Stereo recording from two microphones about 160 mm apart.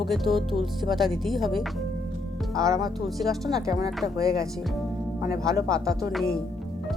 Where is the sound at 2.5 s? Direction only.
20° right (ahead or behind).